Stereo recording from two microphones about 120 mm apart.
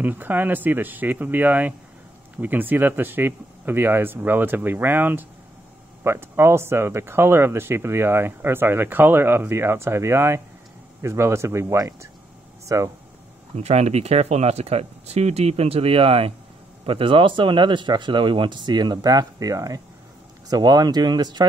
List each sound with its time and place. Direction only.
0.0 s speech: 15° right (ahead or behind)
13.6 s speech: 65° right (ahead or behind); by 21.5 s 35° right (ahead or behind)